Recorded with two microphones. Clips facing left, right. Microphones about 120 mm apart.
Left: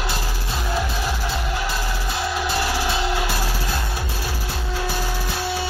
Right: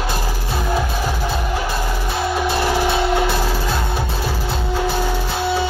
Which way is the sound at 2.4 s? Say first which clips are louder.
Right 7 dB; 55° right (ahead or behind).